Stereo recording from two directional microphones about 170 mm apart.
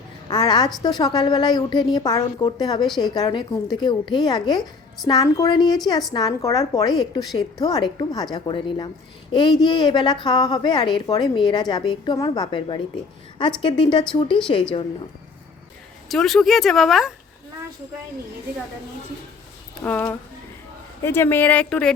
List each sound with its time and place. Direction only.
0.3 s a woman's voice: 25° left (ahead or behind)
16.0 s speech: centre (ahead or behind)
19.8 s speech: 10° left (ahead or behind)